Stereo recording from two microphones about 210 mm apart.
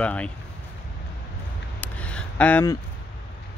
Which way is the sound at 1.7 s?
5° left (ahead or behind).